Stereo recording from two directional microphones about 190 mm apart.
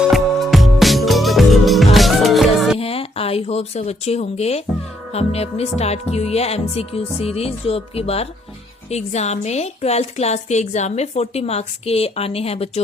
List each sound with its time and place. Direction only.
0.1 s music: centre (ahead or behind)
2.7 s a woman's voice: 30° left (ahead or behind)